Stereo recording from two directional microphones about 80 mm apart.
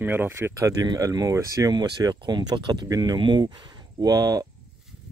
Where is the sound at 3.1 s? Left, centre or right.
Right.